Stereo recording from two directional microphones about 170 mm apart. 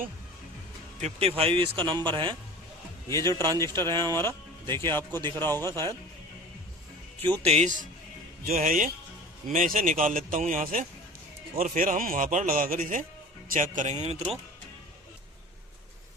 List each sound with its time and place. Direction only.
0.9 s a man's voice: 40° right (ahead or behind)
3.2 s speech: 15° left (ahead or behind)
3.8 s speech: 25° right (ahead or behind)
4.8 s speech: 15° left (ahead or behind)
7.4 s a man's voice: 40° right (ahead or behind)